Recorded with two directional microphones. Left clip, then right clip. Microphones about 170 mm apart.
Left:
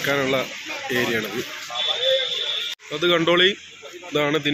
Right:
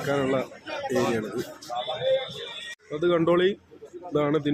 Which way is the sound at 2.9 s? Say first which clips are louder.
Left 4 dB; 5° right (ahead or behind).